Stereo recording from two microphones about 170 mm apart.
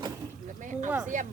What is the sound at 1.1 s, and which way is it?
Speech, 45° right (ahead or behind).